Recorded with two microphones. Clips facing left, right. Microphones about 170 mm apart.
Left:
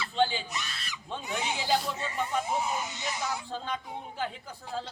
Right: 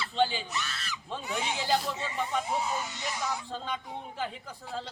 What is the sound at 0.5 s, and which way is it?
Screaming, 15° left (ahead or behind).